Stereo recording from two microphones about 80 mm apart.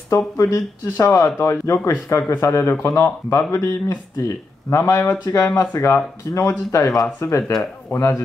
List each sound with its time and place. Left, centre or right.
0.1 s speech: left